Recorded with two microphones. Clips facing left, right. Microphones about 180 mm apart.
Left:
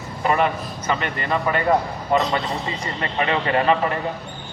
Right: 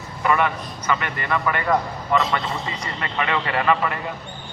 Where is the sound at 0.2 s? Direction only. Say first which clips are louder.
Left 1 dB; 30° left (ahead or behind).